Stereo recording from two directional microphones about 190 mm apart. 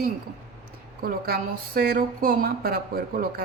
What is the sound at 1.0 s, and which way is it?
Speech, 50° right (ahead or behind).